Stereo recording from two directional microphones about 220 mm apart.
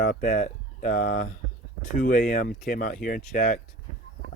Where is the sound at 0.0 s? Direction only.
40° left (ahead or behind).